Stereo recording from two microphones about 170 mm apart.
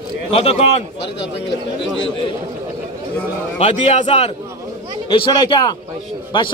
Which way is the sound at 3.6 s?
40° left (ahead or behind).